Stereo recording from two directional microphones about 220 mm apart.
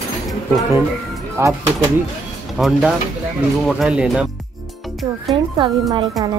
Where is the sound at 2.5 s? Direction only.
Centre (ahead or behind).